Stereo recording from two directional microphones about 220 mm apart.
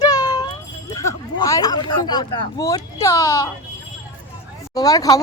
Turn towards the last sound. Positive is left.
turn(degrees=15)  # may be behind; listen again after turning